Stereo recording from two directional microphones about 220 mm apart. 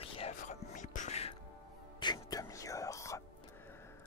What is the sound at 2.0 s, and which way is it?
Whispering, 20° left (ahead or behind).